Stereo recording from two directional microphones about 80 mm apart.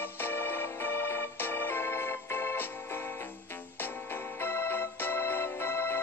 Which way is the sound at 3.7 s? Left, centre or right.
Left.